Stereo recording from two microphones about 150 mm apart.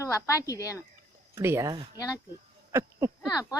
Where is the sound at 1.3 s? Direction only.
15° right (ahead or behind).